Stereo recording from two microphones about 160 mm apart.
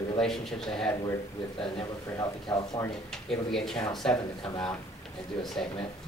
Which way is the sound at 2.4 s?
25° left (ahead or behind).